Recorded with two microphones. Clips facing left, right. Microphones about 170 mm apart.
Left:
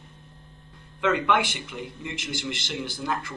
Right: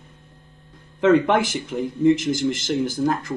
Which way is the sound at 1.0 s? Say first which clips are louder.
Right 7 dB; 40° right (ahead or behind).